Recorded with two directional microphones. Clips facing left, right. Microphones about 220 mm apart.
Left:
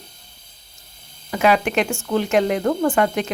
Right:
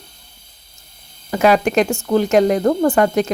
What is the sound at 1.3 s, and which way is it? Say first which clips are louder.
Speech: right 4 dB; 40° right (ahead or behind).